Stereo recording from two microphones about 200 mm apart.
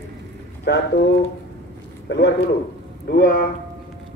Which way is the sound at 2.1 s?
60° left (ahead or behind).